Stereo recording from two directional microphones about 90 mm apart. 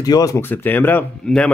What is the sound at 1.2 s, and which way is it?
Speech, 10° left (ahead or behind).